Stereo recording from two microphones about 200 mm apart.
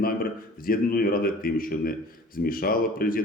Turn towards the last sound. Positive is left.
turn(degrees=45)  # may be behind; listen again after turning